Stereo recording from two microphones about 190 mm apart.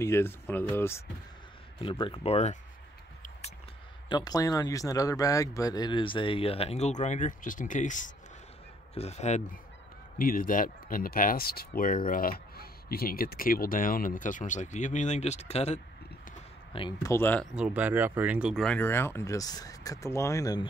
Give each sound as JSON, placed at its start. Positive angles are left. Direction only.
{"t": 0.0, "sound": "speech", "side_deg": 15}
{"t": 1.8, "sound": "speech", "side_deg": 25}
{"t": 4.1, "sound": "speech", "side_deg": 20}
{"t": 10.1, "sound": "speech", "side_deg": 50}
{"t": 17.1, "sound": "speech", "side_deg": 10}
{"t": 17.6, "sound": "speech", "side_deg": -10}